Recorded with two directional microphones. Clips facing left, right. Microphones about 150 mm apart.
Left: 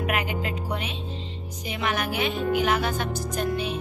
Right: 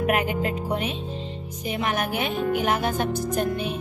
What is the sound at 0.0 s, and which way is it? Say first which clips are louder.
Speech: right 4 dB; 45° right (ahead or behind).